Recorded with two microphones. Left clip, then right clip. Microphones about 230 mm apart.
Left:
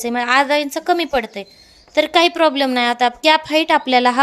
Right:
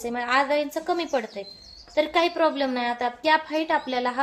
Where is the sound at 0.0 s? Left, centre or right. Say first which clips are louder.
Left 8 dB; left.